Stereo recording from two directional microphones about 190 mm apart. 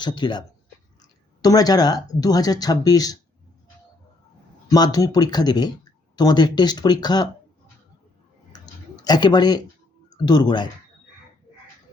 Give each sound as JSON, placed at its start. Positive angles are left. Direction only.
{"t": 0.0, "sound": "speech", "side_deg": 25}
{"t": 4.7, "sound": "speech", "side_deg": 20}
{"t": 8.5, "sound": "a sound", "side_deg": 20}
{"t": 10.2, "sound": "speech", "side_deg": 20}